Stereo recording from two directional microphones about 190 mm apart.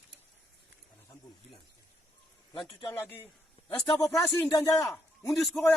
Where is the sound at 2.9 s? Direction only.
10° left (ahead or behind).